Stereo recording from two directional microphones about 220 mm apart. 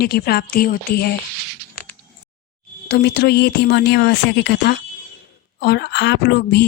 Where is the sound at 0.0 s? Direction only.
45° left (ahead or behind).